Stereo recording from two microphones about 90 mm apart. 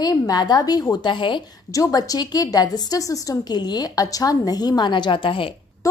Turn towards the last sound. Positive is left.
turn(degrees=70)  # may be behind; listen again after turning